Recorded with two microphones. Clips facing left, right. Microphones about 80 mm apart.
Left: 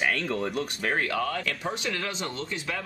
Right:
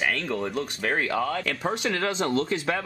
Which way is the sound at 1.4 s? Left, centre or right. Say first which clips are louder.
Right 4 dB; right.